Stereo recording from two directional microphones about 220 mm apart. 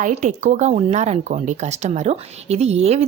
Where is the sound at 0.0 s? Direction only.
35° right (ahead or behind).